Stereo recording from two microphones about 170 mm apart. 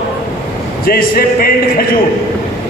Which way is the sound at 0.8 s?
60° left (ahead or behind).